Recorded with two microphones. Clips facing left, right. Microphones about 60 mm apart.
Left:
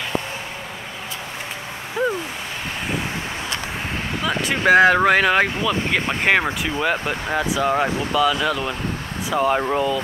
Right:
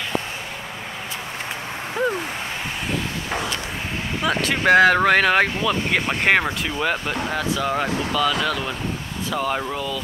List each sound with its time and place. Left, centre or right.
4.6 s speech: centre